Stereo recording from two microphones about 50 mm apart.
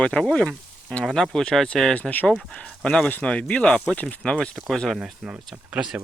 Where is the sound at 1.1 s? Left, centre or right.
Centre.